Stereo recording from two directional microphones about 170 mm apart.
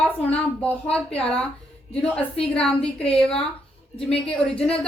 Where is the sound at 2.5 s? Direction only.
5° left (ahead or behind).